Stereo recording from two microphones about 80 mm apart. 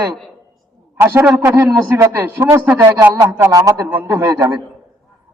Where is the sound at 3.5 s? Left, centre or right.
Right.